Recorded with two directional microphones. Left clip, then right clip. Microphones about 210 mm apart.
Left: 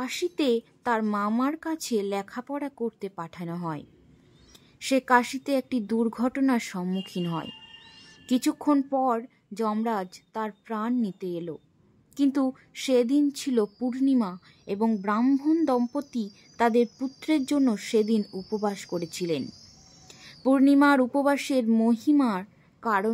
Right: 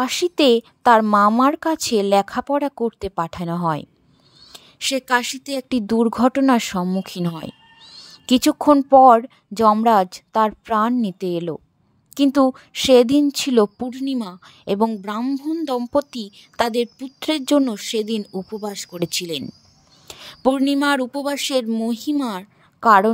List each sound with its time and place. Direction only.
0.0 s a woman's voice: 40° right (ahead or behind)